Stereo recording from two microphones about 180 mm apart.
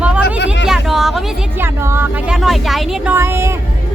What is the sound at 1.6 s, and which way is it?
Speech, 15° right (ahead or behind).